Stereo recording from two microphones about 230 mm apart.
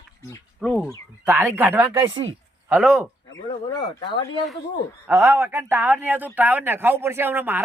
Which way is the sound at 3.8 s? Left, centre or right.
Left.